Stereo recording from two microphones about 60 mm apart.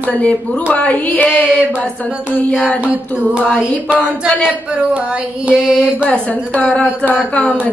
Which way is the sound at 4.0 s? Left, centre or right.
Left.